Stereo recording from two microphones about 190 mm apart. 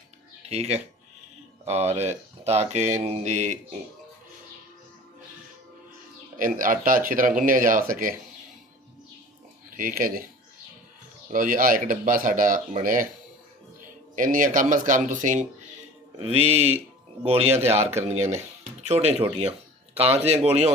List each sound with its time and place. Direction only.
0.4 s speech: 35° right (ahead or behind)
2.0 s speech: 35° right (ahead or behind)
6.4 s speech: 45° right (ahead or behind)
9.7 s speech: 50° right (ahead or behind)
11.3 s speech: 45° right (ahead or behind)
14.2 s speech: 45° right (ahead or behind)